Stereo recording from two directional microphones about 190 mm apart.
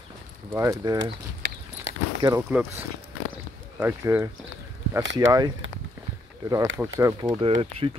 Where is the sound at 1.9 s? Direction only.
75° right (ahead or behind).